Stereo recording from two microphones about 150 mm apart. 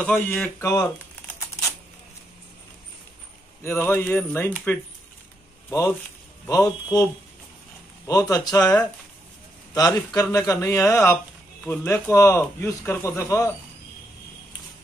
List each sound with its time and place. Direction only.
0.0 s speech: 10° left (ahead or behind)
3.6 s speech: 15° left (ahead or behind)
8.1 s speech: 25° left (ahead or behind)
9.8 s speech: 25° left (ahead or behind)